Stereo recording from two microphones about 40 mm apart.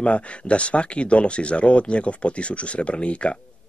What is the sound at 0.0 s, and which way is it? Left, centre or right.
Speech, left.